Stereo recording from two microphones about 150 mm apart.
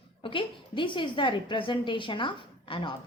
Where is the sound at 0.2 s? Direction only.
35° left (ahead or behind).